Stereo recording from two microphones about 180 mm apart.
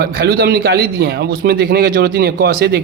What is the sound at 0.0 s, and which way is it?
A man's voice, 55° right (ahead or behind).